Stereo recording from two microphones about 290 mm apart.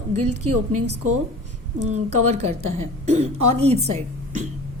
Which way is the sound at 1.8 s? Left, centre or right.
Right.